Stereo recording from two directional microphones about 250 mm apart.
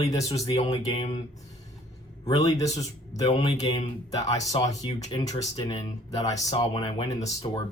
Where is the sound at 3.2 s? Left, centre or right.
Left.